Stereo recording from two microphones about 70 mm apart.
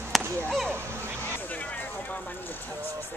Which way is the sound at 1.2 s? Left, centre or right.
Left.